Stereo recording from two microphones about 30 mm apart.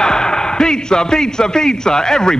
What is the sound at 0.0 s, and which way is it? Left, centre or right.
A man's voice, left.